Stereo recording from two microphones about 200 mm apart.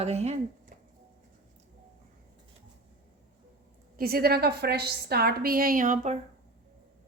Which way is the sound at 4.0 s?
50° right (ahead or behind).